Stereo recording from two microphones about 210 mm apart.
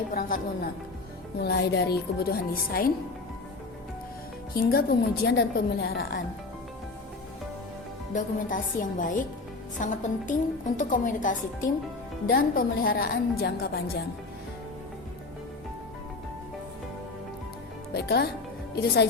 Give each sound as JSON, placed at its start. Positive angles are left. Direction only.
{"t": 0.1, "sound": "a woman's voice", "side_deg": 45}
{"t": 4.5, "sound": "a woman's voice", "side_deg": 45}
{"t": 8.1, "sound": "a woman's voice", "side_deg": 40}
{"t": 17.9, "sound": "a woman's voice", "side_deg": 50}